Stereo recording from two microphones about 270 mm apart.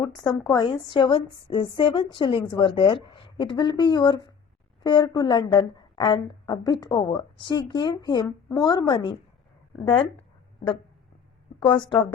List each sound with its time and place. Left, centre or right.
0.5 s a woman's voice: centre
11.6 s a woman's voice: centre